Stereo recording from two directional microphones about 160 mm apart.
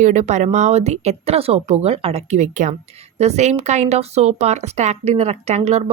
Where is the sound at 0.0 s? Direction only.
45° right (ahead or behind).